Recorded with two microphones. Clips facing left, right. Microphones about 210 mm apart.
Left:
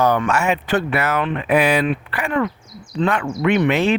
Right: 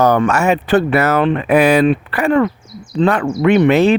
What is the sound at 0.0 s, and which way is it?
Speech, 45° right (ahead or behind).